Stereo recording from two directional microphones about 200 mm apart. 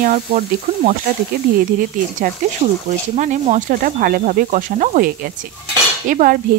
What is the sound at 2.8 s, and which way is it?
Speech, 35° right (ahead or behind).